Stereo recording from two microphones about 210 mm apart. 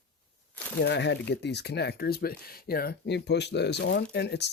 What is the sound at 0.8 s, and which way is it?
Speech, 55° left (ahead or behind).